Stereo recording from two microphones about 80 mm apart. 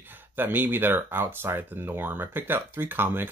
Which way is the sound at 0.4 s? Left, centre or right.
Right.